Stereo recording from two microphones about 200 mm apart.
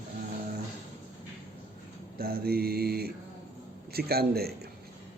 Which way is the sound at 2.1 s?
50° right (ahead or behind).